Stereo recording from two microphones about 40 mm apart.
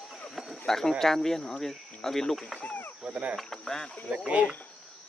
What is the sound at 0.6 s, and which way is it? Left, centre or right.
Speech, centre.